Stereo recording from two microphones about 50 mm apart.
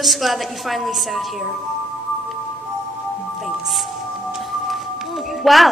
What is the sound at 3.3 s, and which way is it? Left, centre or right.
Music, centre.